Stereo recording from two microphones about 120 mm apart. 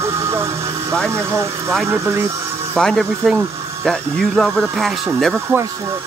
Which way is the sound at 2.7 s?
5° left (ahead or behind).